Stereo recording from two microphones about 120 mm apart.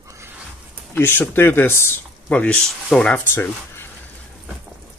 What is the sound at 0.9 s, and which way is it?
Speech, 15° left (ahead or behind).